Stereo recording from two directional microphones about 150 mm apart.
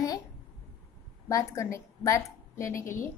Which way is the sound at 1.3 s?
20° left (ahead or behind).